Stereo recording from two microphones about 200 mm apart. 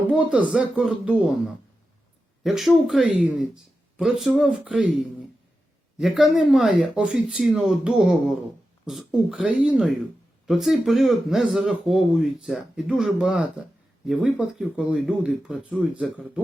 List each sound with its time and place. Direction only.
0.1 s speech: 5° right (ahead or behind)
2.4 s speech: centre (ahead or behind)
6.0 s speech: centre (ahead or behind)